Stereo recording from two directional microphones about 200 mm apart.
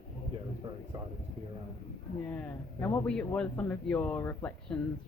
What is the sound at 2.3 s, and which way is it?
A man's voice, 5° left (ahead or behind).